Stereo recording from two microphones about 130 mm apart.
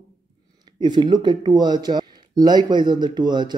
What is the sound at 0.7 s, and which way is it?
Speech, 35° right (ahead or behind).